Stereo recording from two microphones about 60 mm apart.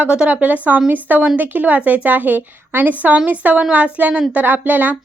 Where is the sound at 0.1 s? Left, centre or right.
Centre.